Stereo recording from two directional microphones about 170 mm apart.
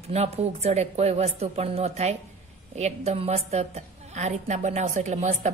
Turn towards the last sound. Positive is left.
turn(degrees=-45)  # may be behind; listen again after turning